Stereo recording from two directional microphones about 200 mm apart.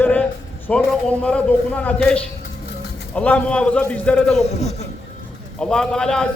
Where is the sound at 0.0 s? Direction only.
10° left (ahead or behind).